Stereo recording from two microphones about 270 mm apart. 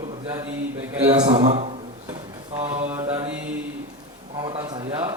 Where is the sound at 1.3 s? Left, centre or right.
Right.